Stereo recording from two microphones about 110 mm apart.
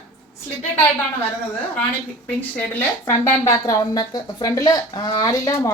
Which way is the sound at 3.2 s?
30° left (ahead or behind).